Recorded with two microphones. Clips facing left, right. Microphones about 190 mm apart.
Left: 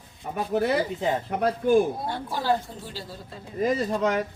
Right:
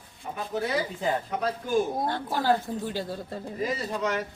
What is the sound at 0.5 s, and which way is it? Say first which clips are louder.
Speech: left 5 dB; 55° left (ahead or behind).